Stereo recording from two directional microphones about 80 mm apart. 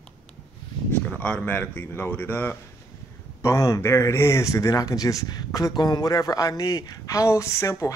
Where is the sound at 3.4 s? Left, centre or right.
Left.